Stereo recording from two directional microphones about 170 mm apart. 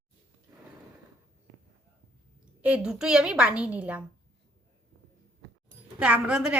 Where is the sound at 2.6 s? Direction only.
10° right (ahead or behind).